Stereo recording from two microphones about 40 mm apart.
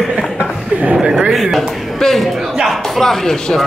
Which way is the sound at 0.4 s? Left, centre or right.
Right.